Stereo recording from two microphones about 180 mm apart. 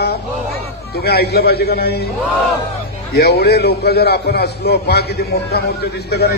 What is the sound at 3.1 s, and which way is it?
A man's voice, 65° left (ahead or behind).